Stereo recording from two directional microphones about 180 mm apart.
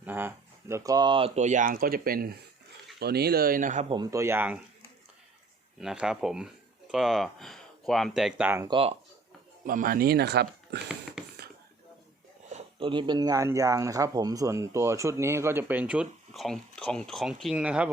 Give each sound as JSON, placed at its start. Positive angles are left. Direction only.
{"t": 0.0, "sound": "speech", "side_deg": -10}
{"t": 1.4, "sound": "speech", "side_deg": -45}
{"t": 3.8, "sound": "speech", "side_deg": -25}
{"t": 5.8, "sound": "speech", "side_deg": -5}
{"t": 8.6, "sound": "speech", "side_deg": -30}
{"t": 9.6, "sound": "speech", "side_deg": -50}
{"t": 12.5, "sound": "speech", "side_deg": -35}